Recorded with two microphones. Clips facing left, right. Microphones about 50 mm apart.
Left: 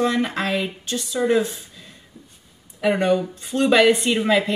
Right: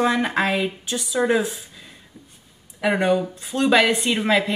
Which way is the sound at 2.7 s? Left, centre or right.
Centre.